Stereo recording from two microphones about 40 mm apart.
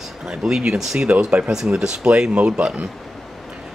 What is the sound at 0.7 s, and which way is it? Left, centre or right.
Speech, right.